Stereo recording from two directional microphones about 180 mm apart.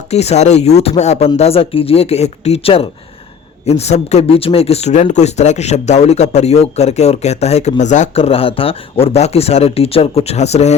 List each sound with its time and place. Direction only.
0.1 s speech: 35° left (ahead or behind)